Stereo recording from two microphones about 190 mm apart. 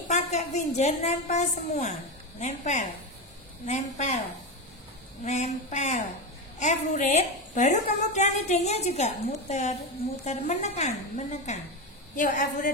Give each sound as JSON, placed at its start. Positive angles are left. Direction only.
{"t": 0.1, "sound": "a woman's voice", "side_deg": 40}
{"t": 5.2, "sound": "a woman's voice", "side_deg": 35}